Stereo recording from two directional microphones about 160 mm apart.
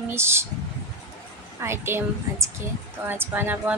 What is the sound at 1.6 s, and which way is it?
A woman's voice, 15° right (ahead or behind).